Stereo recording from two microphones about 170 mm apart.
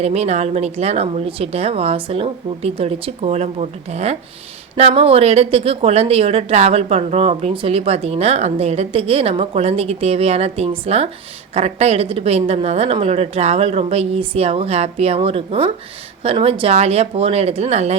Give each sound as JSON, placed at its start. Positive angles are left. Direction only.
{"t": 0.0, "sound": "a woman's voice", "side_deg": -40}